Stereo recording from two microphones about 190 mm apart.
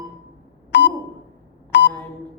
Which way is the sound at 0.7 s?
65° left (ahead or behind).